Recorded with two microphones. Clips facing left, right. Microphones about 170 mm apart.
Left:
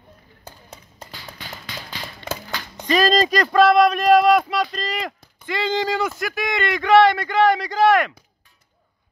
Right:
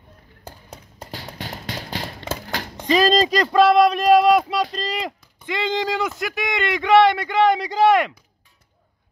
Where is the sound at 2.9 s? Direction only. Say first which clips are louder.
Right 1 dB; 20° right (ahead or behind).